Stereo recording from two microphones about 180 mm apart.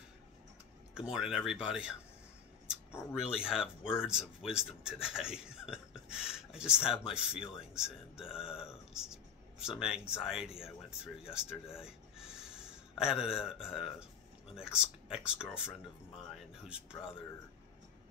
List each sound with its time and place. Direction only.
0.9 s speech: 5° right (ahead or behind)
3.1 s speech: 5° right (ahead or behind)